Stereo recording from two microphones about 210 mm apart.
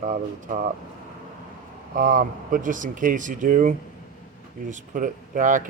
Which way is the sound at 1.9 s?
40° right (ahead or behind).